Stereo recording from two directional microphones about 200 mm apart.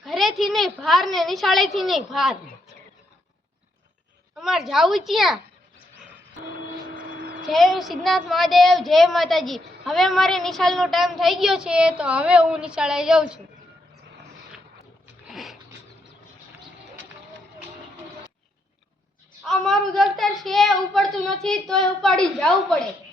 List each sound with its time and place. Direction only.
0.0 s a woman's voice: centre (ahead or behind)
4.4 s a woman's voice: centre (ahead or behind)
6.9 s vehicle: 45° right (ahead or behind)
7.4 s a woman's voice: centre (ahead or behind)
15.3 s a sound: centre (ahead or behind)
19.5 s a woman's voice: centre (ahead or behind)